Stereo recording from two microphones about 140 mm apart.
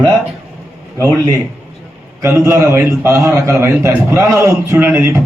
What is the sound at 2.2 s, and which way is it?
A man's voice, 20° right (ahead or behind).